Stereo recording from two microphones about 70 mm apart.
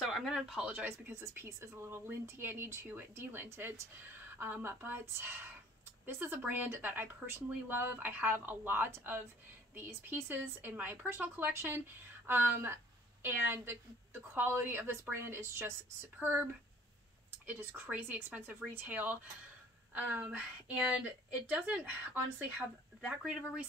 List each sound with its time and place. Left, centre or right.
0.0 s a sound: centre
0.8 s speech: right
16.2 s speech: right
17.5 s speech: right